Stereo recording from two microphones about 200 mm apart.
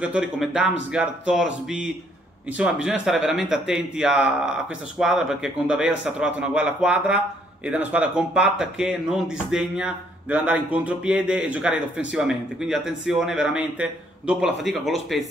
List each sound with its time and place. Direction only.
0.0 s speech: 5° right (ahead or behind)